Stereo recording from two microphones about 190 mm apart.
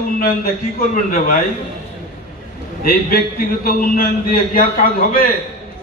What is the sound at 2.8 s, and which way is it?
A man's voice, 50° left (ahead or behind).